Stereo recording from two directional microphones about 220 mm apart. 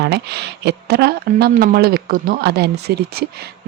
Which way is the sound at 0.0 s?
50° right (ahead or behind).